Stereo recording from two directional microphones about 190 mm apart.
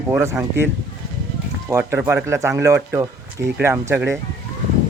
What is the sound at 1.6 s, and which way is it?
A man's voice, 15° right (ahead or behind).